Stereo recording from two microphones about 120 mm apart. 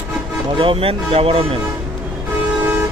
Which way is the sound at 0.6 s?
50° right (ahead or behind).